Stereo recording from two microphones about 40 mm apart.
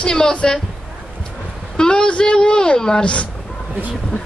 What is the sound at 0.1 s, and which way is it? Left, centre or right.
Speech, centre.